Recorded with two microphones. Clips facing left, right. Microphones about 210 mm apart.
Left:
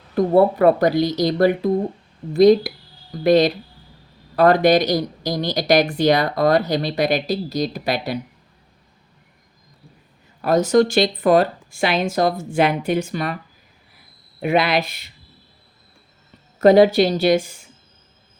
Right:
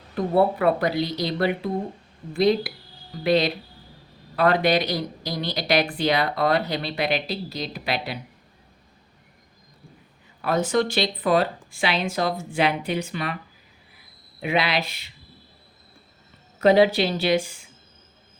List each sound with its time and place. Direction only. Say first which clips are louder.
0.6 s speech: left 6 dB; 45° left (ahead or behind)
10.4 s speech: left 7 dB; 40° left (ahead or behind)
14.4 s speech: left 5 dB; 45° left (ahead or behind)
16.6 s speech: left 5 dB; 45° left (ahead or behind)